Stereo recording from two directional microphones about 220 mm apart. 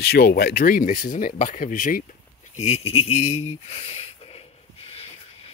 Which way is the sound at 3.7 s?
25° left (ahead or behind).